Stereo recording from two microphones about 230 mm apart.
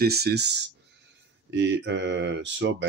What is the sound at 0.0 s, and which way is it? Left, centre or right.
Speech, right.